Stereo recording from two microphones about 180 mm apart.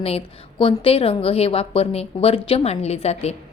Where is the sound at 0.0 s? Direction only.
30° left (ahead or behind).